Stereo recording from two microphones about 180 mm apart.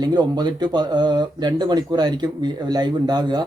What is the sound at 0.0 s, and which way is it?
Speech, 25° right (ahead or behind).